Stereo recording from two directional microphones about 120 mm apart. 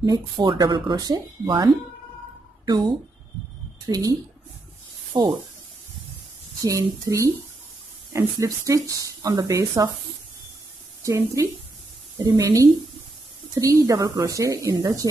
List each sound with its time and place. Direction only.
0.0 s speech: 35° right (ahead or behind)
3.9 s speech: 30° right (ahead or behind)
6.6 s speech: 25° right (ahead or behind)
11.1 s speech: 25° right (ahead or behind)